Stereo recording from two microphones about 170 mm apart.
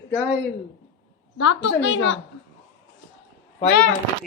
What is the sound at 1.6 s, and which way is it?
Speech, 90° left.